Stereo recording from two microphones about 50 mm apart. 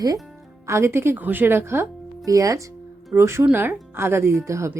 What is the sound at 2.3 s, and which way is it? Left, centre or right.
Speech, right.